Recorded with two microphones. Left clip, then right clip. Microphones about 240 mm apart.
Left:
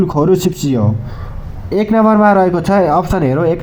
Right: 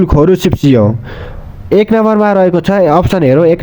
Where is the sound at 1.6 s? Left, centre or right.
Right.